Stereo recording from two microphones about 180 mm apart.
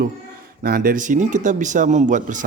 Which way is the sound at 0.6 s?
55° right (ahead or behind).